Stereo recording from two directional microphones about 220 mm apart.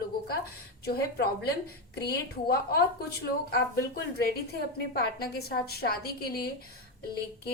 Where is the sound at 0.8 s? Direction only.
45° left (ahead or behind).